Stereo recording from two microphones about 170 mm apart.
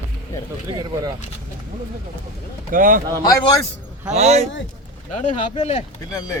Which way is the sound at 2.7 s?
55° right (ahead or behind).